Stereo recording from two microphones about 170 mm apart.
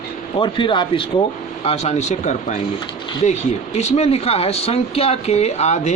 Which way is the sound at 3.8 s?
40° left (ahead or behind).